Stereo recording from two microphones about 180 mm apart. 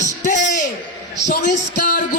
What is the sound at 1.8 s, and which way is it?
Speech, 45° left (ahead or behind).